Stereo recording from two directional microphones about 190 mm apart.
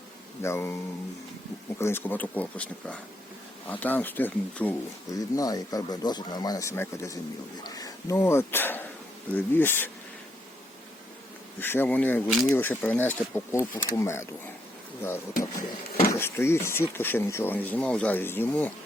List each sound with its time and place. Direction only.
0.4 s speech: 15° left (ahead or behind)
1.8 s speech: 10° left (ahead or behind)
11.6 s speech: 10° left (ahead or behind)